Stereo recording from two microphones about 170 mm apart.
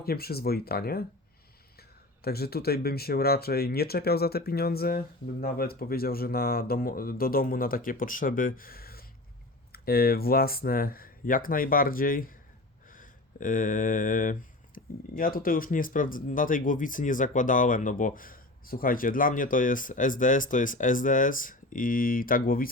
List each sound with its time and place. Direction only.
0.0 s speech: 65° left (ahead or behind)
2.2 s speech: 65° left (ahead or behind)
14.8 s a sound: 50° left (ahead or behind)
15.1 s speech: 60° left (ahead or behind)